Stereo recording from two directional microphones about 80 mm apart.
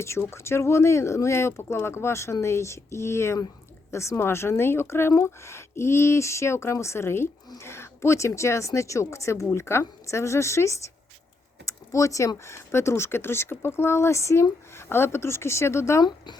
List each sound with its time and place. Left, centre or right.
0.0 s speech: left
16.0 s speech: left